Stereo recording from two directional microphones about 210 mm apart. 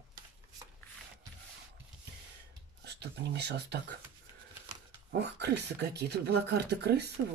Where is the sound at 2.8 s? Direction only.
55° right (ahead or behind).